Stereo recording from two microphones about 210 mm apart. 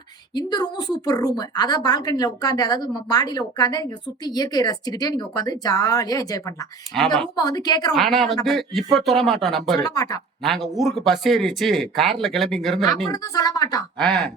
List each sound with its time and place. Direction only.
0.3 s a woman's voice: 20° left (ahead or behind)
6.9 s speech: 5° left (ahead or behind)
7.3 s a woman's voice: 20° left (ahead or behind)
7.9 s speech: centre (ahead or behind)
9.8 s speech: 15° left (ahead or behind)
10.4 s speech: centre (ahead or behind)
13.1 s speech: 15° left (ahead or behind)
14.0 s speech: 5° left (ahead or behind)